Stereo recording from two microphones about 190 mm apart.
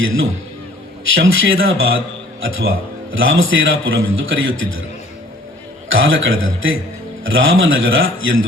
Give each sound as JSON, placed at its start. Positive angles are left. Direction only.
{"t": 1.1, "sound": "a man's voice", "side_deg": -90}
{"t": 5.9, "sound": "a man's voice", "side_deg": -90}